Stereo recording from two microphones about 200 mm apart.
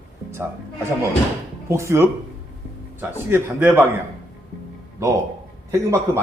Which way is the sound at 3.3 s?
10° right (ahead or behind).